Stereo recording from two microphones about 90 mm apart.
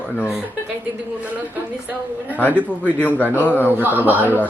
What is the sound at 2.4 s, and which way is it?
Speech, 20° left (ahead or behind).